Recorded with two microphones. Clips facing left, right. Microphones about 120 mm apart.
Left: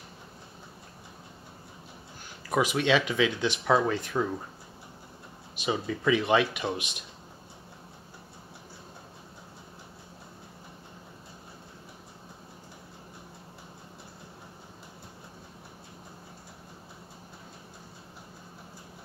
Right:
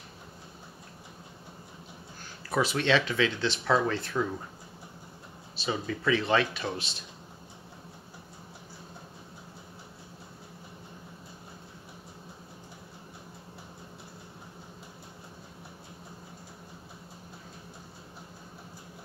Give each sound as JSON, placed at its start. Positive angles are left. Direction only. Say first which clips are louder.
{"t": 2.5, "sound": "speech", "louder": "left 1 dB", "side_deg": 15}
{"t": 5.6, "sound": "speech", "louder": "left 2 dB", "side_deg": 15}